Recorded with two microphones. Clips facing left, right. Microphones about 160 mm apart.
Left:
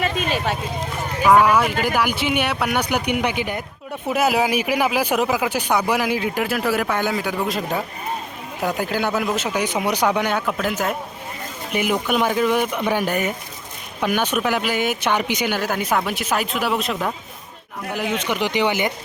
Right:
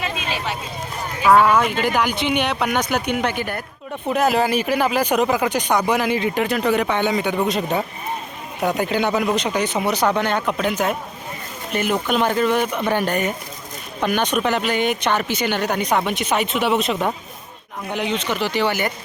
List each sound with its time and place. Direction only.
0.0 s vehicle: 50° left (ahead or behind)
1.3 s speech: 10° left (ahead or behind)